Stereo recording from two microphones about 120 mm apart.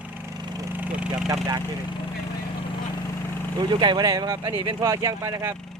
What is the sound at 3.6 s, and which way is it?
Speech, 40° right (ahead or behind).